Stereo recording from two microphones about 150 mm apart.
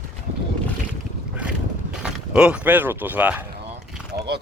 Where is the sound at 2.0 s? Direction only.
5° right (ahead or behind).